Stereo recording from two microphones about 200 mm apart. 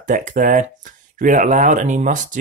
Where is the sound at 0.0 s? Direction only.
40° right (ahead or behind).